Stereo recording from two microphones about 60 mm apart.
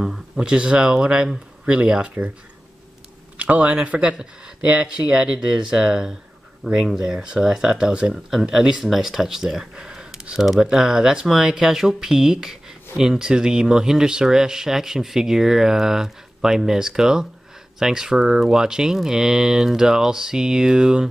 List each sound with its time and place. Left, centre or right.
0.0 s speech: centre
3.3 s speech: right
6.6 s speech: centre
7.0 s speech: centre